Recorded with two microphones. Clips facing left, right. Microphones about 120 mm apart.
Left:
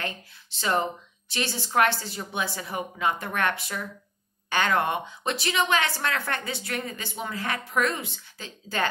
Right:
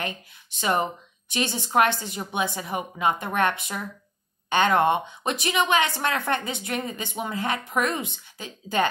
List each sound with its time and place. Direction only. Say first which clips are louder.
0.0 s a woman's voice: right 2 dB; 15° right (ahead or behind)